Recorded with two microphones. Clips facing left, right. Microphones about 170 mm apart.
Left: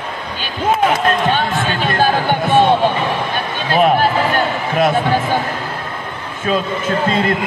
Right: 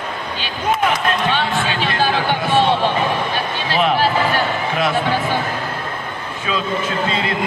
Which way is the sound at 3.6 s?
50° left (ahead or behind).